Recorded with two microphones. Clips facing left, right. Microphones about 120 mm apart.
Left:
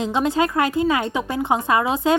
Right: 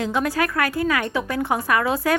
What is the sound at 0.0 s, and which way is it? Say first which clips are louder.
Speech: left 2 dB; 20° left (ahead or behind).